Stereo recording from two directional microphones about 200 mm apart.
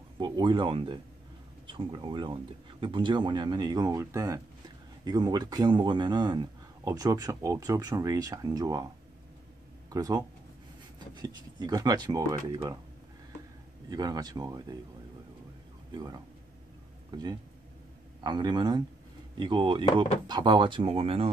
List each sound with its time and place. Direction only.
0.2 s speech: 25° right (ahead or behind)
9.8 s speech: 20° right (ahead or behind)
13.8 s speech: 20° right (ahead or behind)
15.9 s speech: 20° right (ahead or behind)